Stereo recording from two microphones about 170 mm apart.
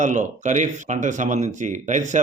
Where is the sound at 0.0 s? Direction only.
45° right (ahead or behind).